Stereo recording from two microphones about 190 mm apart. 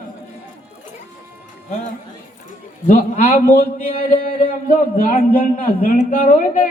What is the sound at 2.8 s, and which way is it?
Speech, 35° left (ahead or behind).